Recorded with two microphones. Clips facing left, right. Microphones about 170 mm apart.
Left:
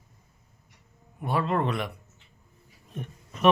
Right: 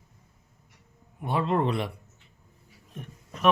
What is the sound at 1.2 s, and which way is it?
Speech, 20° right (ahead or behind).